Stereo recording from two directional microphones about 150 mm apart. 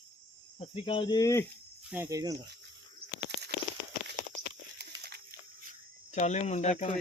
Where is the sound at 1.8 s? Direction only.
10° right (ahead or behind).